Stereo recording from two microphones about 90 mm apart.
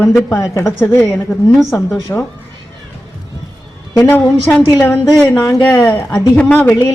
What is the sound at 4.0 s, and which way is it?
Speech, 25° left (ahead or behind).